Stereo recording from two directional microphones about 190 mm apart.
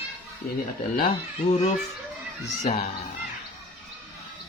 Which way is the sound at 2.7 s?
35° left (ahead or behind).